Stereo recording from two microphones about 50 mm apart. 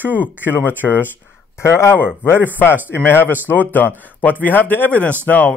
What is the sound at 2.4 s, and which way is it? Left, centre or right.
A man's voice, left.